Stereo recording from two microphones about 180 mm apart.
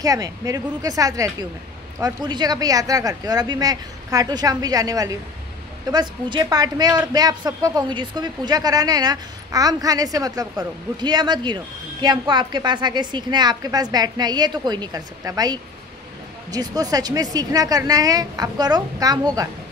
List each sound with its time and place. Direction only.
0.0 s a woman's voice: 20° right (ahead or behind)